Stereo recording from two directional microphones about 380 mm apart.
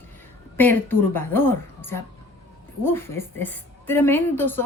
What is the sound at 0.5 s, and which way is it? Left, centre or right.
A woman's voice, centre.